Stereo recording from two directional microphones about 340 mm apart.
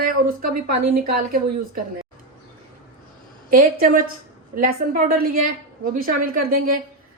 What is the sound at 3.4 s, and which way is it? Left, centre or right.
Speech, right.